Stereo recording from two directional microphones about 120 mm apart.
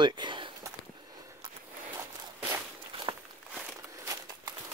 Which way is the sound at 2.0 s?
20° right (ahead or behind).